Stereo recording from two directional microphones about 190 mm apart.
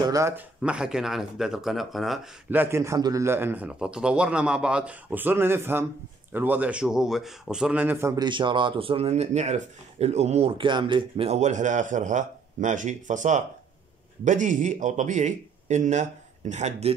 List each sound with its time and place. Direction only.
0.0 s speech: 15° right (ahead or behind)
0.6 s a man's voice: 5° right (ahead or behind); by 16.9 s 35° right (ahead or behind)